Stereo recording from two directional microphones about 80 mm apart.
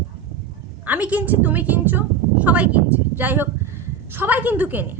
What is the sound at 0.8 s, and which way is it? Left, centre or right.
Speech, centre.